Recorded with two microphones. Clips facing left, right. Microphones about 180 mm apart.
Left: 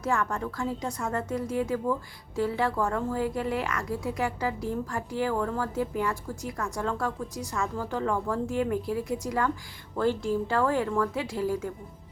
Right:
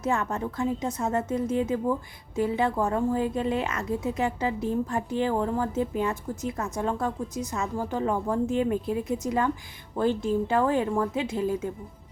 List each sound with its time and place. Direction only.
0.0 s a woman's voice: 20° right (ahead or behind)